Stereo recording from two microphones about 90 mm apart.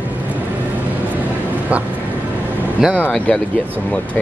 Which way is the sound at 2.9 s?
15° left (ahead or behind).